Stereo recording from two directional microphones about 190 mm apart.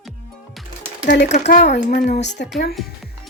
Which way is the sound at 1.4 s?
60° left (ahead or behind).